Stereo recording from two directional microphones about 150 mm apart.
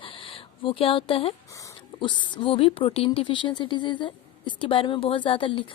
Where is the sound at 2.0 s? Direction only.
30° left (ahead or behind).